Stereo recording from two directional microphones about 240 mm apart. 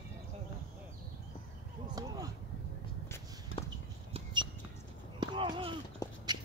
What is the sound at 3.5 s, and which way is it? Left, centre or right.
Clip-clop, left.